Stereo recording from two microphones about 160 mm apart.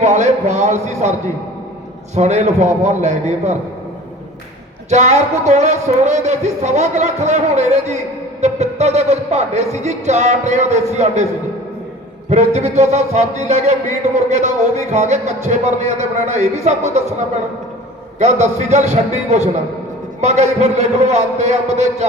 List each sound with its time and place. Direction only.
0.0 s music: 50° right (ahead or behind)
2.1 s music: 45° right (ahead or behind)
4.9 s music: 45° right (ahead or behind)
12.3 s music: 45° right (ahead or behind)
18.2 s music: 45° right (ahead or behind)